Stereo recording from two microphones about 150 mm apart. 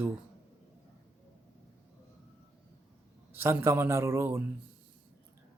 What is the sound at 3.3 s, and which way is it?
A man's voice, 15° right (ahead or behind).